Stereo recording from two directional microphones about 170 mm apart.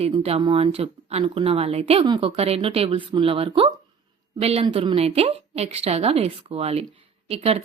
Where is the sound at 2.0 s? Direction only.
25° right (ahead or behind).